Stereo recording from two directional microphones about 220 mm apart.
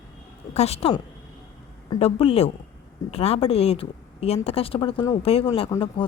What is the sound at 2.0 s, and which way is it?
A woman's voice, 25° left (ahead or behind).